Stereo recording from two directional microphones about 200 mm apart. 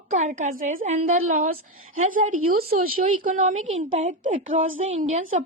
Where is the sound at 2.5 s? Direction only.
45° right (ahead or behind).